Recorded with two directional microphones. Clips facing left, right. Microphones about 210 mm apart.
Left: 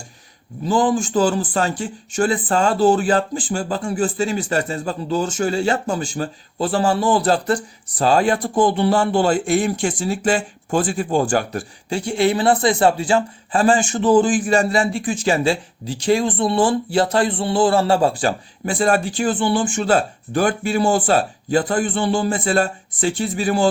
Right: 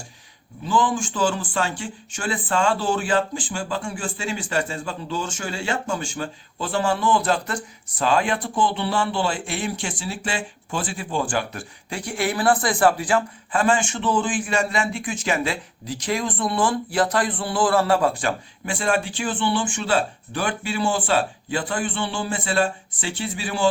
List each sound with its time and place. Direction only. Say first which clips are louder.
0.6 s a man's voice: left 5 dB; 40° left (ahead or behind)